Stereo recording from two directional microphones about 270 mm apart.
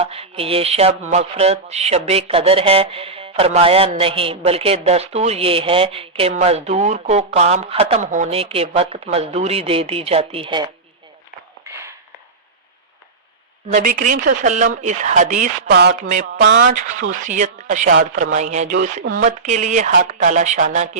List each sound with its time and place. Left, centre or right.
0.0 s speech: right
11.6 s a sound: centre
13.7 s speech: right
17.0 s speech: right